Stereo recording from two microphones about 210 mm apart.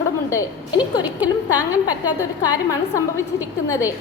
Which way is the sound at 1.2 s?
5° right (ahead or behind).